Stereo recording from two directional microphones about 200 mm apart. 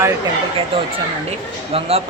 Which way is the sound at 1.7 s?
30° right (ahead or behind).